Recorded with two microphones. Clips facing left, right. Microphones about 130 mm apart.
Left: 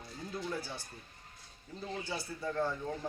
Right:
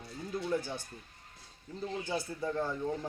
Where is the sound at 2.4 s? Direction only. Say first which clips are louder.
Left 1 dB; 20° right (ahead or behind).